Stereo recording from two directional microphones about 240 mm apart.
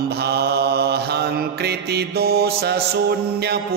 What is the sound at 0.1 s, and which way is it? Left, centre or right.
Mantra, right.